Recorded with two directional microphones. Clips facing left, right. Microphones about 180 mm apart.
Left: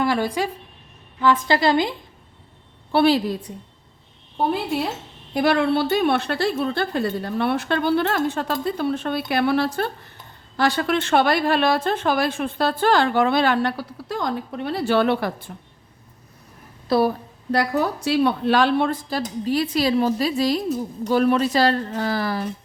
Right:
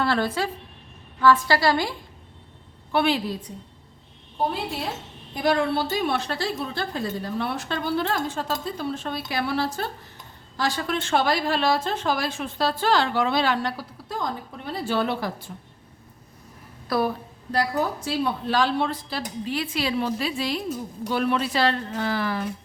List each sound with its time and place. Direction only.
0.0 s a woman's voice: 15° left (ahead or behind)
2.9 s a woman's voice: 35° left (ahead or behind)
5.3 s a woman's voice: 70° left (ahead or behind)
16.9 s a woman's voice: 25° left (ahead or behind)
17.5 s a woman's voice: 70° left (ahead or behind); by 22.4 s 40° left (ahead or behind)